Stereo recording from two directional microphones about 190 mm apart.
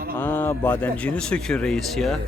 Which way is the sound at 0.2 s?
10° left (ahead or behind).